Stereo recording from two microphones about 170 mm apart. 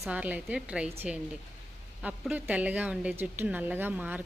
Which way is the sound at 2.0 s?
10° right (ahead or behind).